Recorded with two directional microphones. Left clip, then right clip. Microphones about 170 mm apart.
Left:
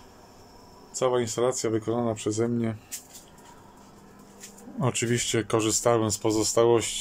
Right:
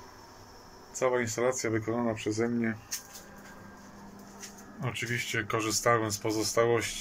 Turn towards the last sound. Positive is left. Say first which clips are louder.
# left 5 dB
turn(degrees=20)  # may be behind; listen again after turning